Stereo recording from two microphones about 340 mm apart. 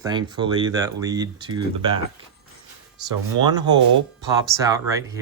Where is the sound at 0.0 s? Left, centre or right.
Centre.